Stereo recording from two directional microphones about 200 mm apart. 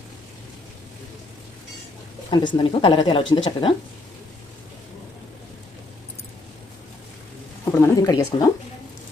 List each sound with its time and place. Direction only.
2.3 s a woman's voice: 25° left (ahead or behind)
7.6 s speech: 15° left (ahead or behind)